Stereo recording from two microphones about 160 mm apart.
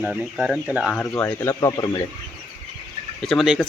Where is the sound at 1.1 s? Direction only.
15° left (ahead or behind).